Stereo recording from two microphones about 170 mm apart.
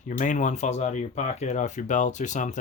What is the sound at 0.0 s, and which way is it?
Speech, 50° left (ahead or behind).